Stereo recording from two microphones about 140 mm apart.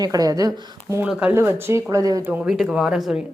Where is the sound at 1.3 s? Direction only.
15° right (ahead or behind).